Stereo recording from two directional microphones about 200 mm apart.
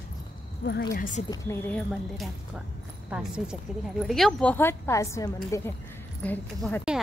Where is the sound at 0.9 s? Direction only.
40° left (ahead or behind).